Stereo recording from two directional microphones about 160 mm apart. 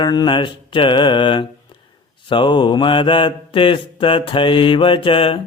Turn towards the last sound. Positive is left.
turn(degrees=35)  # may be behind; listen again after turning